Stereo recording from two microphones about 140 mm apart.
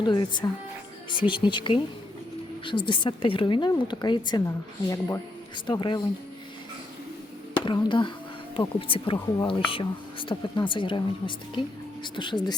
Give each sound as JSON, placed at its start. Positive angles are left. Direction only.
{"t": 0.0, "sound": "a woman's voice", "side_deg": 35}
{"t": 7.5, "sound": "a woman's voice", "side_deg": 35}